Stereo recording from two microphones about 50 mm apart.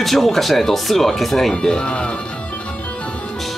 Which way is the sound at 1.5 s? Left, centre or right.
Centre.